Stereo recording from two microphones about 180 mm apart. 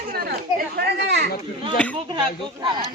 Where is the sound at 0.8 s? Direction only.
70° right (ahead or behind).